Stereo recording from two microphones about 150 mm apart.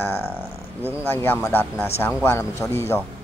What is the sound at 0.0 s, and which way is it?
Speech, 15° left (ahead or behind).